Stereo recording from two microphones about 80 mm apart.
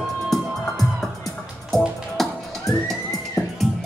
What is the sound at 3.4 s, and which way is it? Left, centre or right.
Music, left.